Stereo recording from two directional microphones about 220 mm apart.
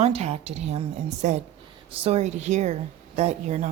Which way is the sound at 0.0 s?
30° right (ahead or behind).